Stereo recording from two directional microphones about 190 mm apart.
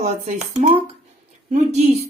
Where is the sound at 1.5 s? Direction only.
35° right (ahead or behind).